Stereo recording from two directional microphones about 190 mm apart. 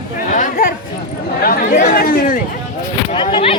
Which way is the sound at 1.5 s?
40° left (ahead or behind).